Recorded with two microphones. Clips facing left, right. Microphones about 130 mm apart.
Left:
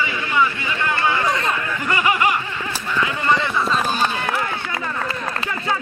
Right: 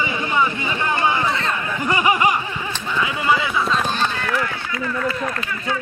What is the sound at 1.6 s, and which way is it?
Laughter, 20° right (ahead or behind).